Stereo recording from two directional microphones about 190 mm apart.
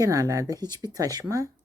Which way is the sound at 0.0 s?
15° right (ahead or behind).